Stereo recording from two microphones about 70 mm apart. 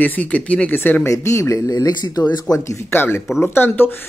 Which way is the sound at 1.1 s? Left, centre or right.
Left.